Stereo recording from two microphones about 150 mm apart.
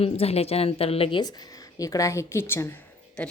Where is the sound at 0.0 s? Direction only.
40° left (ahead or behind).